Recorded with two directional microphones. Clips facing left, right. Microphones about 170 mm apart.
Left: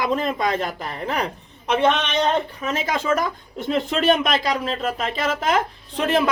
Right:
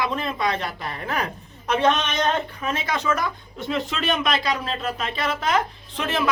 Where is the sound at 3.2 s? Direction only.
50° left (ahead or behind).